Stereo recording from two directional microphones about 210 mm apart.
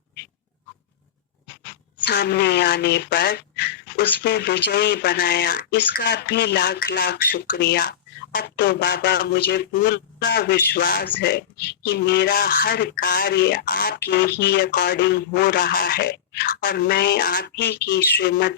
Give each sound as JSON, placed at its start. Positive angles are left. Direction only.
{"t": 2.0, "sound": "speech", "side_deg": 50}